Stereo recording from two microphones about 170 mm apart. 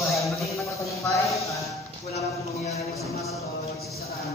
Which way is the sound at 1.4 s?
20° left (ahead or behind).